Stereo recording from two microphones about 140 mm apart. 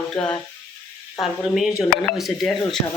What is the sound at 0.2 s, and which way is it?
Speech, 5° left (ahead or behind).